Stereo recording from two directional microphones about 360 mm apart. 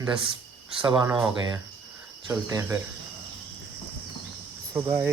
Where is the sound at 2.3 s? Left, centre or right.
Centre.